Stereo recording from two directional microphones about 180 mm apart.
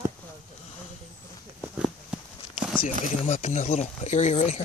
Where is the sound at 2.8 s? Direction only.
40° left (ahead or behind).